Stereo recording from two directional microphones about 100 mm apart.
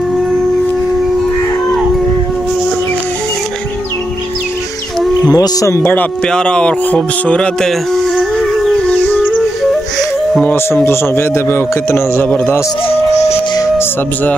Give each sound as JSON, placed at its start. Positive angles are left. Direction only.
{"t": 5.2, "sound": "speech", "side_deg": 40}
{"t": 6.2, "sound": "speech", "side_deg": 10}
{"t": 8.9, "sound": "music", "side_deg": 15}
{"t": 10.4, "sound": "a man's voice", "side_deg": 20}
{"t": 12.8, "sound": "music", "side_deg": 90}